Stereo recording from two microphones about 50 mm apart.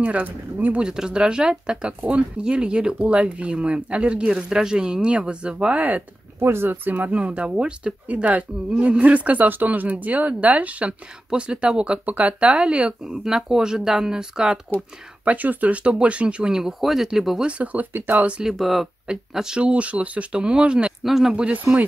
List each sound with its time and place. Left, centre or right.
0.0 s speech: right
0.7 s speech: centre
4.3 s speech: centre
5.8 s speech: right
6.4 s speech: right; by 11.8 s centre
11.8 s speech: right
15.2 s speech: right
16.5 s speech: centre
17.4 s speech: right
17.9 s speech: right
18.4 s speech: centre
19.3 s speech: centre
21.0 s speech: centre